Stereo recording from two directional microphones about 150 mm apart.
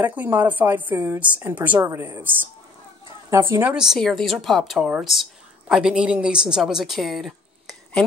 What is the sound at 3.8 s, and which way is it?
A woman's voice, centre (ahead or behind).